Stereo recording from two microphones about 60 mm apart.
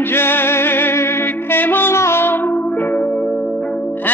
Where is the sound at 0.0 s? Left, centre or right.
Left.